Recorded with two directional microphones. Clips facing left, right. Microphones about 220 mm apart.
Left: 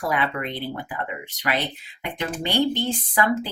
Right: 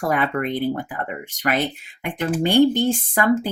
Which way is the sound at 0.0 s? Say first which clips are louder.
Right 4 dB; 45° right (ahead or behind).